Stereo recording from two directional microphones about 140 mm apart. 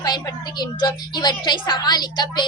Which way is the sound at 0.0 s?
30° left (ahead or behind).